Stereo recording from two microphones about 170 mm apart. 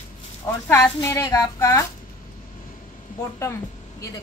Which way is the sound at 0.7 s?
15° left (ahead or behind).